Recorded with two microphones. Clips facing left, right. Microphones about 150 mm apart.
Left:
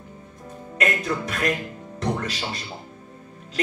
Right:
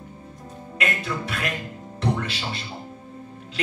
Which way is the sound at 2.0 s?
40° left (ahead or behind).